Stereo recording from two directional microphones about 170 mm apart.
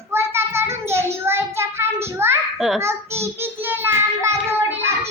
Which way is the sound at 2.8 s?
15° right (ahead or behind).